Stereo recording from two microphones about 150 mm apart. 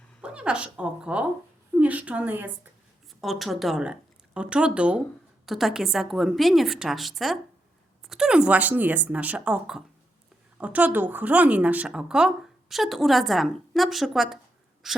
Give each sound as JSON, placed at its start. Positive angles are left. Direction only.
{"t": 0.2, "sound": "a woman's voice", "side_deg": -5}
{"t": 3.2, "sound": "speech", "side_deg": 0}
{"t": 14.8, "sound": "a sound", "side_deg": 0}